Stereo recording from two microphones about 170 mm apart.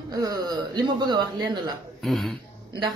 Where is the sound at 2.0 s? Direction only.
Centre (ahead or behind).